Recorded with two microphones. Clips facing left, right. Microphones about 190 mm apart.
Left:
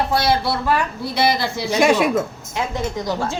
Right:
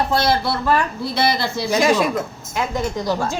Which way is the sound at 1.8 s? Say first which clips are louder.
Left 2 dB; 60° left (ahead or behind).